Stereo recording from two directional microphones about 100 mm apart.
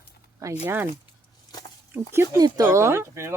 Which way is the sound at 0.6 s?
20° right (ahead or behind).